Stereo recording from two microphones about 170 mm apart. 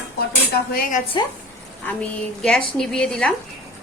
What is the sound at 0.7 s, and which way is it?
Speech, 60° left (ahead or behind).